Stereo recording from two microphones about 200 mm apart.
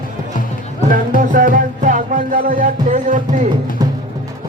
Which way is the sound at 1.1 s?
40° right (ahead or behind).